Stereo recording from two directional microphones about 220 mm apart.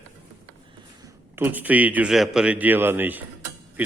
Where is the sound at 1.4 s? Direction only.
10° right (ahead or behind).